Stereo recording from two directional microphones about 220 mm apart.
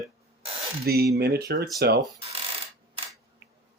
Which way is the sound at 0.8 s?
45° right (ahead or behind).